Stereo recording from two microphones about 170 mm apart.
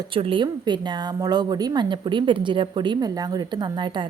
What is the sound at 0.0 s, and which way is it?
A woman's voice, 30° right (ahead or behind).